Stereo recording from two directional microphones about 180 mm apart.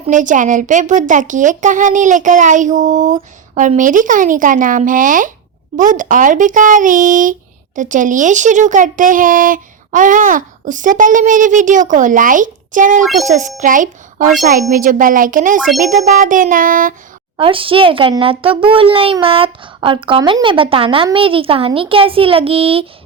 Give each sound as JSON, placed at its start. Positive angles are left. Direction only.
{"t": 0.1, "sound": "speech", "side_deg": -45}
{"t": 17.3, "sound": "a child's voice", "side_deg": -30}